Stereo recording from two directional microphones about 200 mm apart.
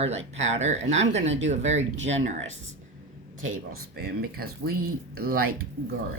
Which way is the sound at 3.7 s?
50° right (ahead or behind).